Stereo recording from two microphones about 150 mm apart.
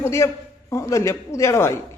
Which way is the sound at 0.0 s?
20° left (ahead or behind).